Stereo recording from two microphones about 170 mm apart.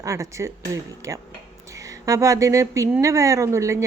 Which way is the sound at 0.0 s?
20° right (ahead or behind).